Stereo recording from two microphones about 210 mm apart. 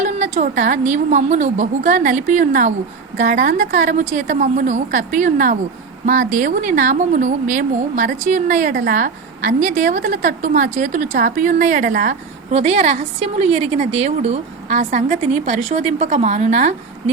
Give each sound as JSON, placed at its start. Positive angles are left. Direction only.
{"t": 0.0, "sound": "speech", "side_deg": -35}